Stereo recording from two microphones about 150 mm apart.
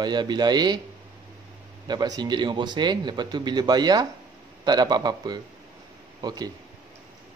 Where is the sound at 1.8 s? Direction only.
25° right (ahead or behind).